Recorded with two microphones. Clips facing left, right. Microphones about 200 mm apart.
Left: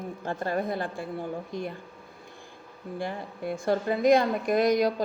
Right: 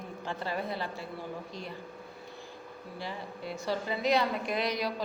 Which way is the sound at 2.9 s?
50° left (ahead or behind).